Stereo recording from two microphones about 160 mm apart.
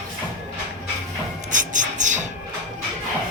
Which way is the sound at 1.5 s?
50° right (ahead or behind).